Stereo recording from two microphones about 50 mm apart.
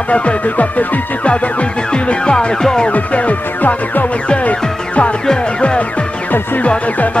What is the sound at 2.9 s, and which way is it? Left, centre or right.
Music, left.